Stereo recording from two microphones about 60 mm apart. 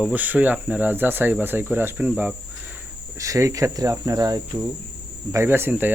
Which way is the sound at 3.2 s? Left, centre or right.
Right.